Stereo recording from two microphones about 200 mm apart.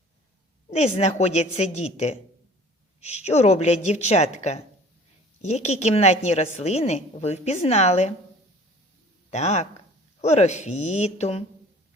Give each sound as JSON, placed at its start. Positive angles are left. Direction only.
{"t": 0.7, "sound": "a woman's voice", "side_deg": 35}
{"t": 9.3, "sound": "a woman's voice", "side_deg": 35}